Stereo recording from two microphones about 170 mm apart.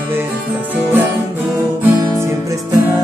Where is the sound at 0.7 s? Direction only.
10° right (ahead or behind).